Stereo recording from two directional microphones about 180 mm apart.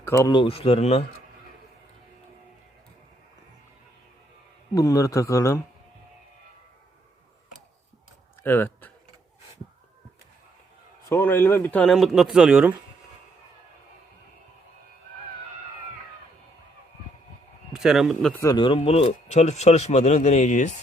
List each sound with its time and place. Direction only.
0.0 s speech: 15° left (ahead or behind); by 1.0 s 35° left (ahead or behind)
4.7 s speech: 20° left (ahead or behind)
8.4 s speech: 10° left (ahead or behind)
11.1 s a man's voice: 10° left (ahead or behind)
17.7 s speech: 5° right (ahead or behind)
18.3 s speech: 20° left (ahead or behind); by 20.7 s 40° left (ahead or behind)